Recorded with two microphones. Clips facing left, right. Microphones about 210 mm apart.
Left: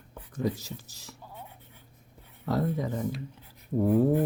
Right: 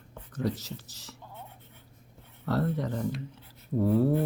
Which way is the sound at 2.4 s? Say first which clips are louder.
Even; 10° left (ahead or behind).